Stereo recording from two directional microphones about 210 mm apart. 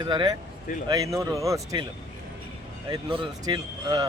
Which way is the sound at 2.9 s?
25° right (ahead or behind).